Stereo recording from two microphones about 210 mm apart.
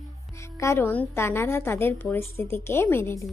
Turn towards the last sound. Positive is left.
turn(degrees=10)  # may be behind; listen again after turning